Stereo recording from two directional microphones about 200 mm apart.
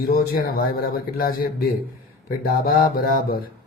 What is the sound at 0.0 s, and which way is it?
Speech, 45° left (ahead or behind).